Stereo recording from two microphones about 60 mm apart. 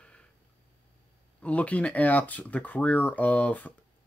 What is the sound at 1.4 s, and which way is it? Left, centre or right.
Speech, left.